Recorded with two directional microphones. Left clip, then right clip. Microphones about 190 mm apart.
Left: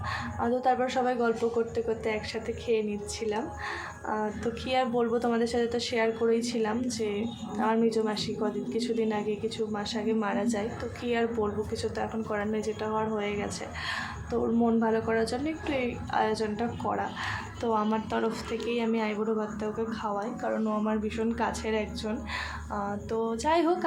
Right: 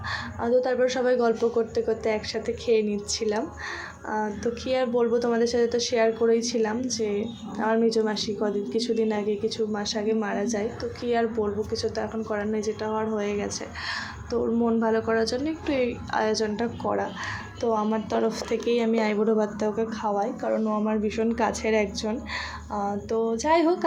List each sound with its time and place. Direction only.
0.1 s speech: 10° right (ahead or behind)
4.7 s speech: 10° right (ahead or behind)